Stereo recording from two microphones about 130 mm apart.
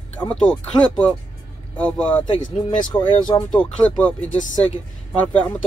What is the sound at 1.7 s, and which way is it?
Speech, 10° left (ahead or behind).